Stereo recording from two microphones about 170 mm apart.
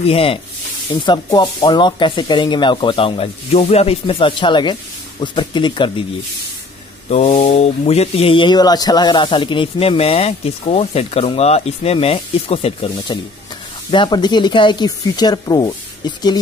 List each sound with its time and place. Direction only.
0.0 s speech: 35° left (ahead or behind)
7.1 s speech: 40° left (ahead or behind); by 15.7 s 25° left (ahead or behind)